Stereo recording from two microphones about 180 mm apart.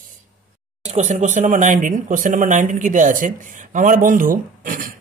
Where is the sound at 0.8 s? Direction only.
40° right (ahead or behind).